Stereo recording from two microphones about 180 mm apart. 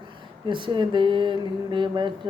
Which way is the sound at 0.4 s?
25° right (ahead or behind).